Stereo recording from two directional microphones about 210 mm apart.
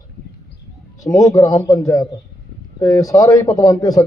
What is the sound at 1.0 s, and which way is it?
A man's voice, 15° left (ahead or behind).